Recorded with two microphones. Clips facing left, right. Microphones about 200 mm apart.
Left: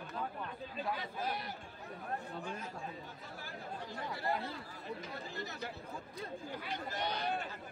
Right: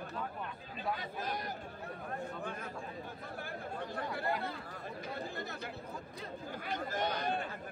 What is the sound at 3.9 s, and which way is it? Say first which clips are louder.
Speech: right 1 dB; 55° right (ahead or behind).